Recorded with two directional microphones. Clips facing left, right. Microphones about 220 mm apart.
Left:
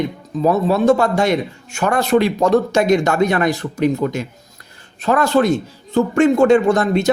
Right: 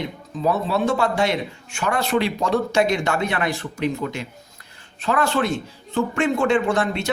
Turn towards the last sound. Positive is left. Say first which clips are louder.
# left 6 dB
turn(degrees=40)  # may be behind; listen again after turning